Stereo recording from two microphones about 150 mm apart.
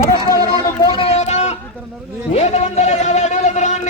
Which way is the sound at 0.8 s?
35° left (ahead or behind).